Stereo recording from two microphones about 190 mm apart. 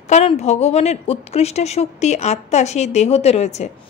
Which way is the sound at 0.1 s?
35° left (ahead or behind).